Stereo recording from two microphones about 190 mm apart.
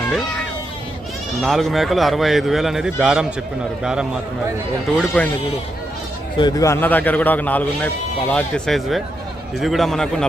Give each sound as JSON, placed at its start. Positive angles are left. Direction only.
{"t": 1.4, "sound": "a man's voice", "side_deg": 0}
{"t": 4.9, "sound": "a man's voice", "side_deg": 5}
{"t": 6.4, "sound": "a man's voice", "side_deg": 15}